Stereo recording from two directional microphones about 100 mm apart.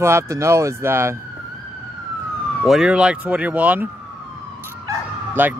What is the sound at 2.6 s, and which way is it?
Speech, 5° right (ahead or behind).